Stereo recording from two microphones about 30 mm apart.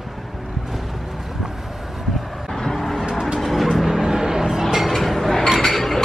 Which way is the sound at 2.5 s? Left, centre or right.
Centre.